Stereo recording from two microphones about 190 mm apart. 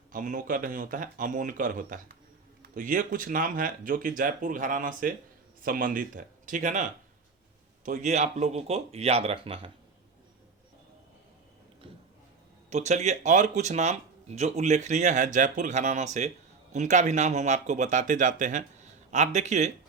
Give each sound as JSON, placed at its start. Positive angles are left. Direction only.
{"t": 0.1, "sound": "speech", "side_deg": -45}
{"t": 12.7, "sound": "speech", "side_deg": -35}